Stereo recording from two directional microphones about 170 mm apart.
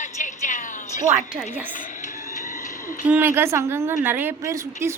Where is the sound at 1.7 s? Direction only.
50° left (ahead or behind).